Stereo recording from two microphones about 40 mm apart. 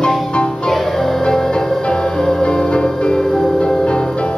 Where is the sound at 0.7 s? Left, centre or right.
Centre.